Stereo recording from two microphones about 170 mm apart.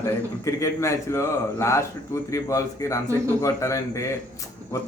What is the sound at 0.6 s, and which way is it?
A man's voice, 15° left (ahead or behind).